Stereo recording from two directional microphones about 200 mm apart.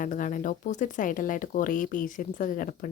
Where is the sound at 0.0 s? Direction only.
40° left (ahead or behind).